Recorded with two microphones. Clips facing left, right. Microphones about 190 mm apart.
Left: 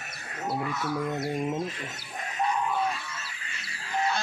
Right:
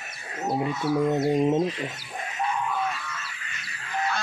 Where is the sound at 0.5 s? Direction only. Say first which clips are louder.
Right 6 dB; 20° right (ahead or behind).